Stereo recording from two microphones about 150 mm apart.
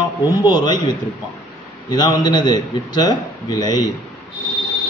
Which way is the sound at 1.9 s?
30° left (ahead or behind).